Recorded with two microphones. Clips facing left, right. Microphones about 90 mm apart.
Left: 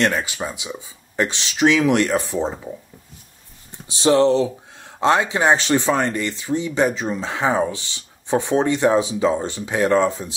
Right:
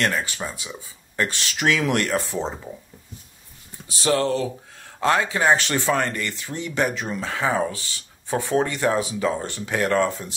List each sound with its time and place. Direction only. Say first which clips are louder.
0.5 s speech: left 4 dB; 15° left (ahead or behind)
4.0 s speech: left 6 dB; 25° left (ahead or behind)